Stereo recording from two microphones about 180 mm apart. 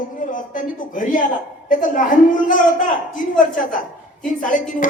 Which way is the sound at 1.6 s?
45° left (ahead or behind).